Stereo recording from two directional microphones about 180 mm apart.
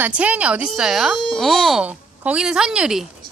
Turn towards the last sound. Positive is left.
turn(degrees=-5)  # may be behind; listen again after turning